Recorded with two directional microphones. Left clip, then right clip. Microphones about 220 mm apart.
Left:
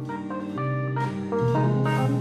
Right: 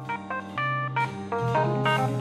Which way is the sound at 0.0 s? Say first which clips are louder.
Right 1 dB; 30° right (ahead or behind).